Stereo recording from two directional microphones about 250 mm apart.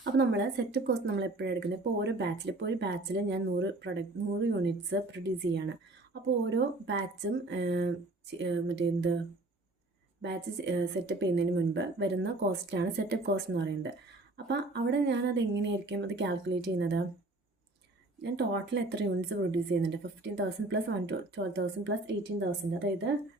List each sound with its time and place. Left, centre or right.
0.0 s a woman's voice: right
18.2 s a woman's voice: right